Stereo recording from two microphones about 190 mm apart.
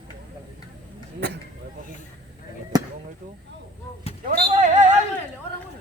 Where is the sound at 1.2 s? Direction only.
60° right (ahead or behind).